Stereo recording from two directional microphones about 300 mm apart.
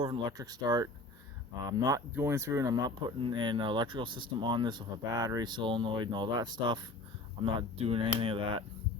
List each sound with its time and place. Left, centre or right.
0.0 s speech: centre